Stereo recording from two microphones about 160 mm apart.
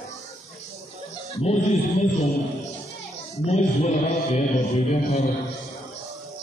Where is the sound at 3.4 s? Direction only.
45° left (ahead or behind).